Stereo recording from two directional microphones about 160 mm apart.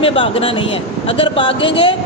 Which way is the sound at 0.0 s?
35° left (ahead or behind).